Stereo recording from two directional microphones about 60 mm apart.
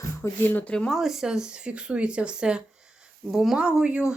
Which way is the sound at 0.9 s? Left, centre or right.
Centre.